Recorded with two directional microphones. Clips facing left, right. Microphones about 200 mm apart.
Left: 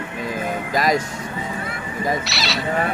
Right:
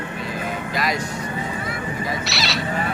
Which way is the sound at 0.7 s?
45° left (ahead or behind).